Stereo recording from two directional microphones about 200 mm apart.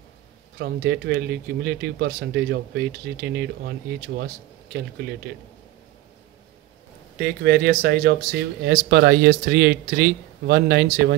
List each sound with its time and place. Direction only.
0.6 s speech: 55° right (ahead or behind)
7.2 s speech: 50° right (ahead or behind)